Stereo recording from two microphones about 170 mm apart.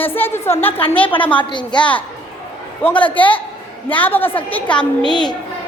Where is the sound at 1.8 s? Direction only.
10° left (ahead or behind).